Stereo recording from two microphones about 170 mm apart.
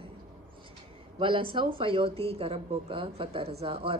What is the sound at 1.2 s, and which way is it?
Speech, 30° right (ahead or behind).